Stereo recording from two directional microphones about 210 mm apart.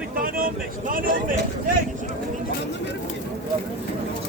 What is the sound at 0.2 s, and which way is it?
Vehicle, 40° right (ahead or behind).